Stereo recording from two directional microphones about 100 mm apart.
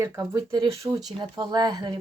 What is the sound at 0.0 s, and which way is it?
Speech, 35° right (ahead or behind).